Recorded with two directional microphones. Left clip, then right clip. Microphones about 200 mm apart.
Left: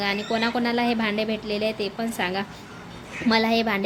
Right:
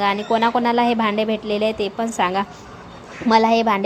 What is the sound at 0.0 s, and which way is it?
A woman's voice, 5° right (ahead or behind).